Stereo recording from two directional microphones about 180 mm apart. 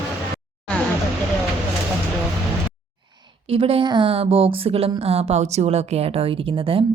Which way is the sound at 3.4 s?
30° right (ahead or behind).